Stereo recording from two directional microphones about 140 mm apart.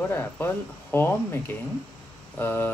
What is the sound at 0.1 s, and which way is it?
Speech, 15° left (ahead or behind).